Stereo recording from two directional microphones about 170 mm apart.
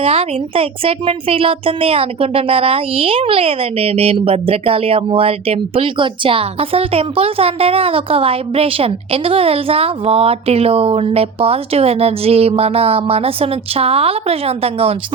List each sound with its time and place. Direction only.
0.0 s speech: 35° right (ahead or behind)